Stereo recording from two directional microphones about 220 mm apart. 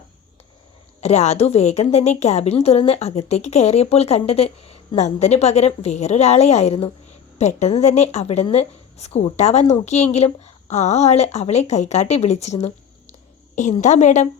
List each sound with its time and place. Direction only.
1.0 s a woman's voice: 30° left (ahead or behind)